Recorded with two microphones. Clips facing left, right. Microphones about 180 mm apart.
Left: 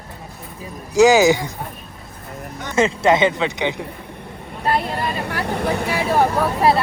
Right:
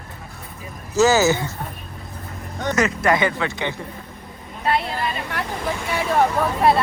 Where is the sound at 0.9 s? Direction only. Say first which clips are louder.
Left 4 dB; 15° left (ahead or behind).